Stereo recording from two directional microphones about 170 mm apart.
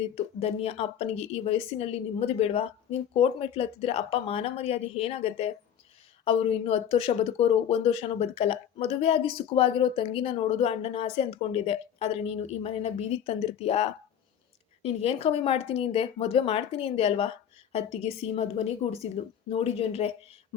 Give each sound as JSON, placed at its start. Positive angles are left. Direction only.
{"t": 0.2, "sound": "speech", "side_deg": 35}